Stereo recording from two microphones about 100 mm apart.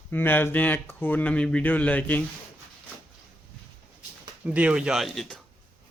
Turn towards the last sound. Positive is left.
turn(degrees=5)  # may be behind; listen again after turning